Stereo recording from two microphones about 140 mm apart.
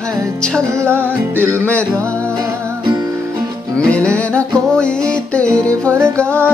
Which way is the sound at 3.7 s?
10° left (ahead or behind).